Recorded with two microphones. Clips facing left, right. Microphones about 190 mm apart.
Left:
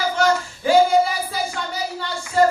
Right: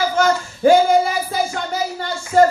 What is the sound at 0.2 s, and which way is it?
Child singing, 45° right (ahead or behind).